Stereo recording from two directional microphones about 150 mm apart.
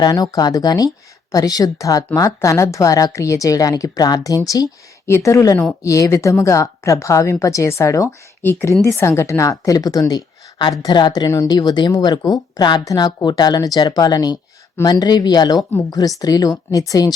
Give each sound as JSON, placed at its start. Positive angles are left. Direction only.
{"t": 0.0, "sound": "a woman's voice", "side_deg": 25}